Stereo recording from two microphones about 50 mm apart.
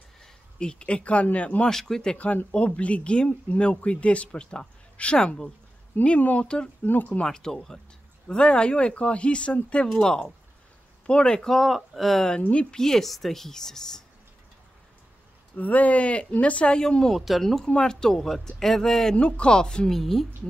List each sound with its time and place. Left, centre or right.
0.2 s speech: centre
1.7 s speech: centre
2.1 s speech: left
6.0 s speech: left
6.9 s speech: left
7.2 s speech: centre
9.8 s speech: centre
12.4 s speech: left
12.7 s speech: centre
15.5 s speech: left; by 17.2 s centre
17.2 s speech: centre
19.1 s speech: left
19.9 s speech: centre